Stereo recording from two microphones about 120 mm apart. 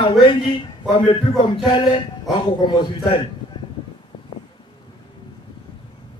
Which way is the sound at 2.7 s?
40° left (ahead or behind).